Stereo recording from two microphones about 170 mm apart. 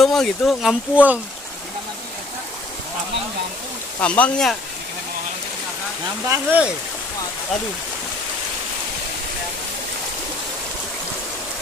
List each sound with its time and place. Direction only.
0.0 s speech: centre (ahead or behind)
4.0 s speech: 5° left (ahead or behind)
6.2 s speech: 15° right (ahead or behind)